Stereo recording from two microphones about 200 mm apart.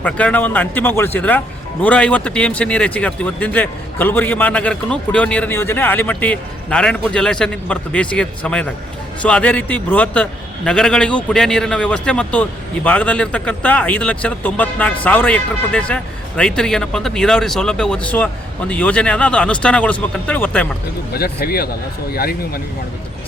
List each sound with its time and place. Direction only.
0.0 s speech: 5° left (ahead or behind)
21.1 s speech: 50° left (ahead or behind)